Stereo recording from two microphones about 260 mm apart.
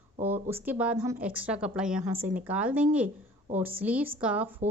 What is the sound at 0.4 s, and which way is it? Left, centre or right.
Speech, centre.